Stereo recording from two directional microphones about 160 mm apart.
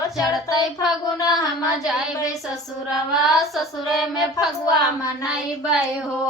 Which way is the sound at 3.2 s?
Centre (ahead or behind).